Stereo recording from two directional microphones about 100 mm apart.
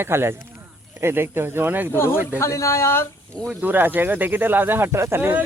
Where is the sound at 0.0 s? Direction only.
25° right (ahead or behind).